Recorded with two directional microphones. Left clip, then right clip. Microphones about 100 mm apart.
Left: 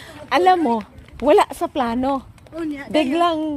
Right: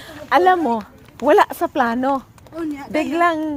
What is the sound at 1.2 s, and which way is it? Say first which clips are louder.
Speech: right 1 dB; 5° left (ahead or behind).